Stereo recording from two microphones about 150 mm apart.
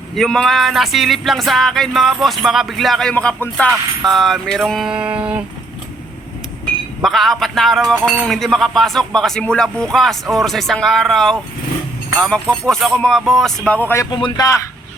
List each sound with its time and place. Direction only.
0.1 s speech: 5° left (ahead or behind)
7.0 s speech: centre (ahead or behind); by 14.5 s 25° left (ahead or behind)